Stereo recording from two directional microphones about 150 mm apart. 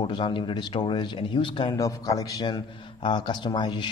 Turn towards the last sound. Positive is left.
turn(degrees=30)  # may be behind; listen again after turning